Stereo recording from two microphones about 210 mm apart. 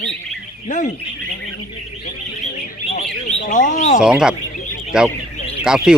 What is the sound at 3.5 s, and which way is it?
Speech, 40° left (ahead or behind).